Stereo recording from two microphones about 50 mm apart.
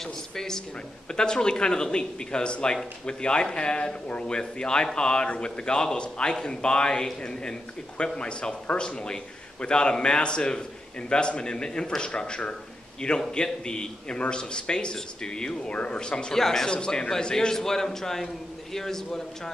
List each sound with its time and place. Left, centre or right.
0.0 s a man's voice: centre
8.2 s a man's voice: centre